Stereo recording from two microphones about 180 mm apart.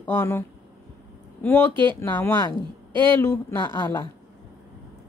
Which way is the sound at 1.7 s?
25° right (ahead or behind).